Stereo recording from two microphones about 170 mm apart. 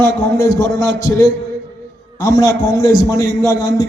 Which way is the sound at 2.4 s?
20° left (ahead or behind).